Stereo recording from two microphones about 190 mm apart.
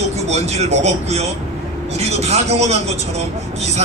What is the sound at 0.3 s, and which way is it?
A man's voice, 35° right (ahead or behind).